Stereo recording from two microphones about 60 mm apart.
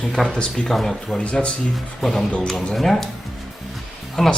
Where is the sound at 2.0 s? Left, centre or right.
Centre.